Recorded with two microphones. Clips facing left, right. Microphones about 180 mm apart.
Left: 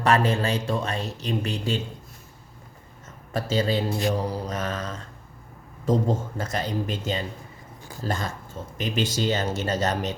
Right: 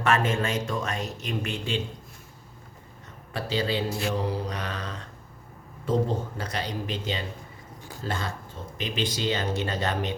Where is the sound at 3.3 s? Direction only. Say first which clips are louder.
Left 3 dB; 45° left (ahead or behind).